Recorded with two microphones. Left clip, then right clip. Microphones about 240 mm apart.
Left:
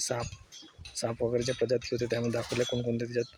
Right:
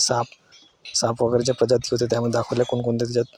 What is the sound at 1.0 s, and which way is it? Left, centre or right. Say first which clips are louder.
Speech: right 9 dB; right.